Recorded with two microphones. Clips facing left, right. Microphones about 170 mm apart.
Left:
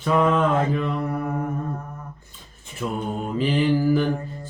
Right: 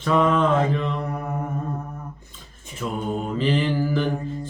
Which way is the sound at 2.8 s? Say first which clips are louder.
Even; 15° left (ahead or behind).